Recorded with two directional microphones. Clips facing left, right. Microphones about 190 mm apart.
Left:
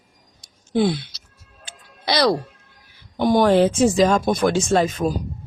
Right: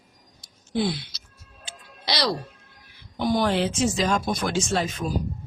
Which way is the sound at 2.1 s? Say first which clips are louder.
Left 7 dB; 55° left (ahead or behind).